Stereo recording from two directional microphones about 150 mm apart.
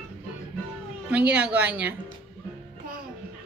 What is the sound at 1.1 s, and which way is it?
Speech, 10° right (ahead or behind).